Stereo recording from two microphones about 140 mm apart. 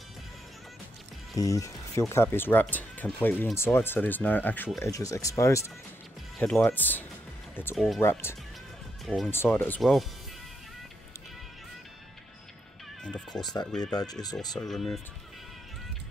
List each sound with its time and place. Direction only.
1.3 s speech: 25° left (ahead or behind)
6.3 s speech: 5° left (ahead or behind)
6.6 s speech: 15° left (ahead or behind)
7.7 s speech: centre (ahead or behind)
8.0 s speech: 15° left (ahead or behind)
9.0 s speech: centre (ahead or behind)
9.3 s speech: 15° left (ahead or behind)
9.8 s speech: centre (ahead or behind)
13.0 s neigh: 5° left (ahead or behind)
13.4 s speech: 30° left (ahead or behind)
13.7 s speech: 5° left (ahead or behind)